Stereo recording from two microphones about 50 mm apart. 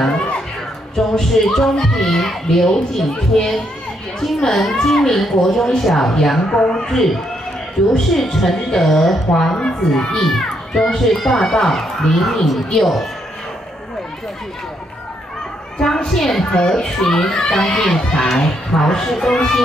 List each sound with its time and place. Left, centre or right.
0.9 s a woman's voice: centre
6.4 s a woman's voice: centre
15.8 s speech: centre